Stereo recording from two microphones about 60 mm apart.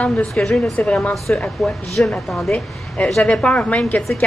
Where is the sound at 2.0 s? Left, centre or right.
Left.